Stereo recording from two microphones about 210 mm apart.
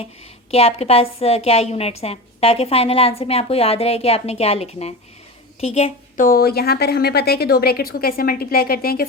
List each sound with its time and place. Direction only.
0.5 s a woman's voice: 30° left (ahead or behind); by 9.0 s 45° left (ahead or behind)